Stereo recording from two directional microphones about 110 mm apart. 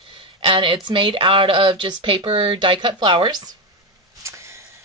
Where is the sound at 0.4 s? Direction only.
50° right (ahead or behind).